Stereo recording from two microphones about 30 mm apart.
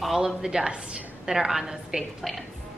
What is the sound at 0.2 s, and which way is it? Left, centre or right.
A woman's voice, right.